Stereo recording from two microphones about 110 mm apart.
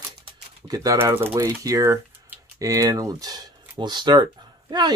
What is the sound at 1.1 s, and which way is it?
Speech, 20° right (ahead or behind).